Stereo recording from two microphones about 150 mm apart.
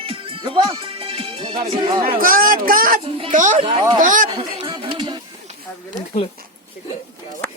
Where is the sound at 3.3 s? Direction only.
55° right (ahead or behind).